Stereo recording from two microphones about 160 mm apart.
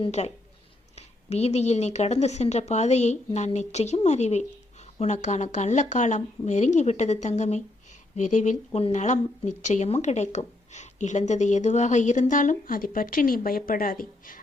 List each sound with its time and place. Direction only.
0.0 s speech: 40° left (ahead or behind); by 14.4 s 60° left (ahead or behind)